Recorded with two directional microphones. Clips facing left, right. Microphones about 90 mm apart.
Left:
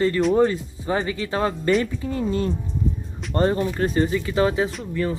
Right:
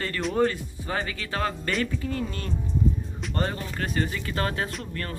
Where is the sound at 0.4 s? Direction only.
25° left (ahead or behind).